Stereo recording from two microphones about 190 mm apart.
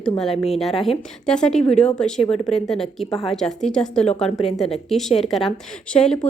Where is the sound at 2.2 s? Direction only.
30° left (ahead or behind).